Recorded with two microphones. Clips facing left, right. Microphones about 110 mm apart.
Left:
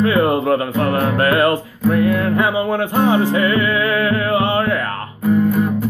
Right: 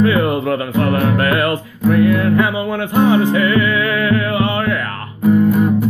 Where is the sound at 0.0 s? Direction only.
30° left (ahead or behind).